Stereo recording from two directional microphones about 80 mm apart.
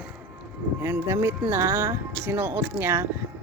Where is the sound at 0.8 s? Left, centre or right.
Right.